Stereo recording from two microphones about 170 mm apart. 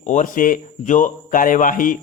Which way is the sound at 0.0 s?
50° left (ahead or behind).